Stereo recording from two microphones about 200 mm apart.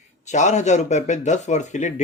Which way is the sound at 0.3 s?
35° left (ahead or behind).